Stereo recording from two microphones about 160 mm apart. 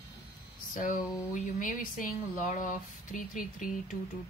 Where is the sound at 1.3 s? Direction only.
55° left (ahead or behind).